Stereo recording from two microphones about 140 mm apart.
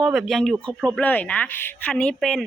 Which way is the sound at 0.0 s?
5° right (ahead or behind).